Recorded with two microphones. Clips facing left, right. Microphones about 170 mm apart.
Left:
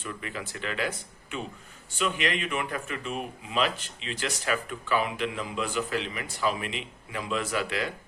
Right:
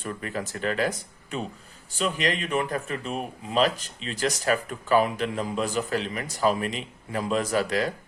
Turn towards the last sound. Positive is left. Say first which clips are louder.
# right 5 dB
turn(degrees=-40)  # may be behind; listen again after turning